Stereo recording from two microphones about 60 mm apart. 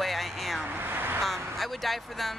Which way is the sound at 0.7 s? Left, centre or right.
Right.